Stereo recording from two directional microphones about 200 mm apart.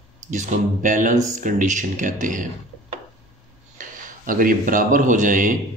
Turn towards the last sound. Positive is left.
turn(degrees=-40)  # may be behind; listen again after turning